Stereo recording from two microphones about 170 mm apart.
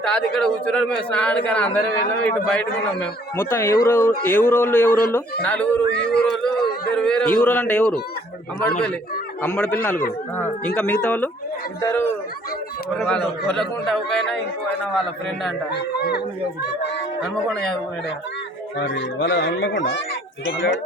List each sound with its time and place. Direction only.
0.0 s speech: 5° left (ahead or behind)
6.0 s a man's voice: 75° left (ahead or behind)
6.9 s speech: 5° left (ahead or behind)
15.7 s a man's voice: 75° left (ahead or behind)
18.8 s speech: 90° left